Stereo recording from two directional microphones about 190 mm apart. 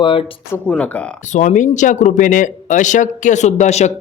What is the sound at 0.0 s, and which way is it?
Speech, 25° left (ahead or behind).